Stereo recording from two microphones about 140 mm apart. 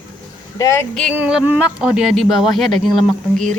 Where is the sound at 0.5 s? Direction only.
20° left (ahead or behind).